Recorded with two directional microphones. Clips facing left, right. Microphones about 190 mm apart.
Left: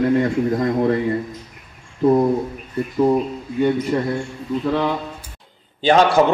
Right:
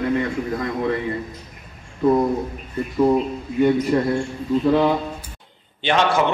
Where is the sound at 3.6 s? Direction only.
10° right (ahead or behind).